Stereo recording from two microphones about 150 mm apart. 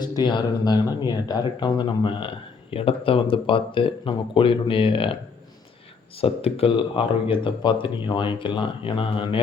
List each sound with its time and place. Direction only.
0.0 s speech: 30° left (ahead or behind)
6.1 s speech: 40° left (ahead or behind)